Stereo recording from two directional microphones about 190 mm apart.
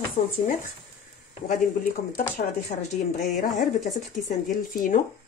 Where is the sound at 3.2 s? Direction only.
45° left (ahead or behind).